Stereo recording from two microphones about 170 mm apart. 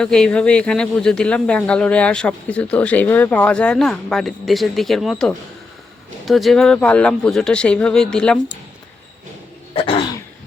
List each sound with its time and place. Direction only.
0.0 s speech: 5° left (ahead or behind)
9.7 s throat clearing: 30° left (ahead or behind)